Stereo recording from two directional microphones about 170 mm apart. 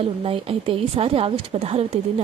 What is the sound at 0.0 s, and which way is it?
Speech, 35° right (ahead or behind).